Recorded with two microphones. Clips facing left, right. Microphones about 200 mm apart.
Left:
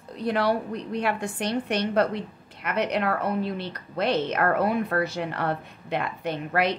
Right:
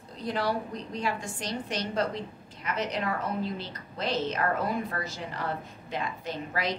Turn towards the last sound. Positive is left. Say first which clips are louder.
# left 7 dB
turn(degrees=65)  # may be behind; listen again after turning